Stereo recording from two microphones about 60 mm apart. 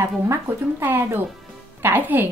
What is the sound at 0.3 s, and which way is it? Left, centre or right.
A woman's voice, right.